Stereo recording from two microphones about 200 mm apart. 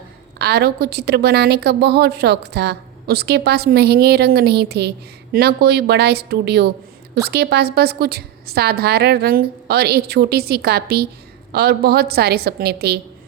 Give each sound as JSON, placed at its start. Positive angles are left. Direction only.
{"t": 0.3, "sound": "a woman's voice", "side_deg": -55}